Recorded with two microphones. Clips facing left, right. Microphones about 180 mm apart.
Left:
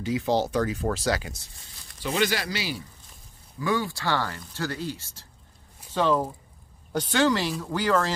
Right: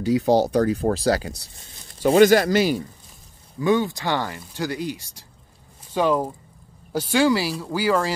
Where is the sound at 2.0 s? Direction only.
45° right (ahead or behind).